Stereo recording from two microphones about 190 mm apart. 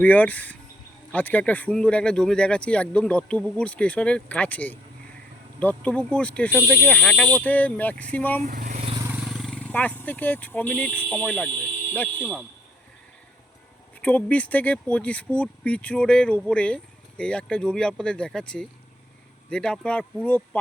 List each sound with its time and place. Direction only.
0.0 s speech: 10° left (ahead or behind)
8.4 s vehicle: 45° right (ahead or behind)
9.2 s speech: centre (ahead or behind)
14.0 s speech: 10° left (ahead or behind)